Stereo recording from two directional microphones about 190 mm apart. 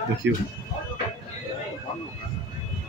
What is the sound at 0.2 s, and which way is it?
Speech, 70° right (ahead or behind).